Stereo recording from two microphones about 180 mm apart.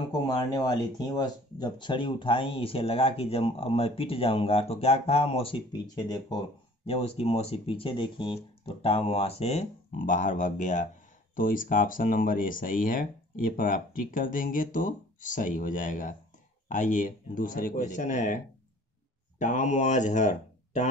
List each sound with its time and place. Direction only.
0.1 s speech: 20° left (ahead or behind)
6.9 s speech: 35° left (ahead or behind)